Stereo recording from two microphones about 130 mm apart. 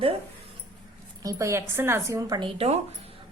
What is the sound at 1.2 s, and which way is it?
A woman's voice, 25° right (ahead or behind).